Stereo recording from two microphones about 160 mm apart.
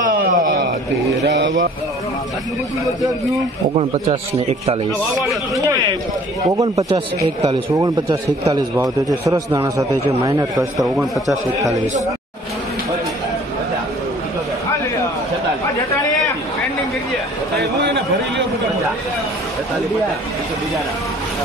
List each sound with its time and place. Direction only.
0.0 s a sound: 65° right (ahead or behind)
6.5 s a man's voice: 20° right (ahead or behind)
10.8 s a man's voice: centre (ahead or behind)
17.6 s speech: 90° right